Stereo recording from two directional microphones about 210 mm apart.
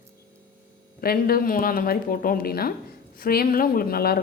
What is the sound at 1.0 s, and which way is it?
Speech, 45° left (ahead or behind).